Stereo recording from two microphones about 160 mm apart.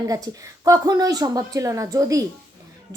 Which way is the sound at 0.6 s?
25° right (ahead or behind).